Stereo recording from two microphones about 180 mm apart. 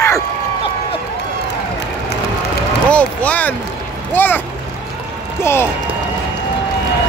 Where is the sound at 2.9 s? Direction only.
10° left (ahead or behind).